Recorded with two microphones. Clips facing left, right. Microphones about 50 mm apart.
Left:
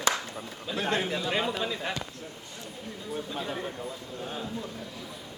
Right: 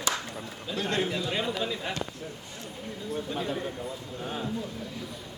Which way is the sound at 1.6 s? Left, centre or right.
Centre.